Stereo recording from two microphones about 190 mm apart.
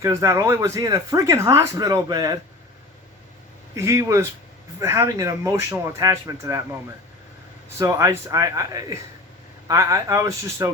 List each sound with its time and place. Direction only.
0.0 s speech: 15° right (ahead or behind)
3.8 s speech: 15° right (ahead or behind)
7.8 s speech: 15° right (ahead or behind)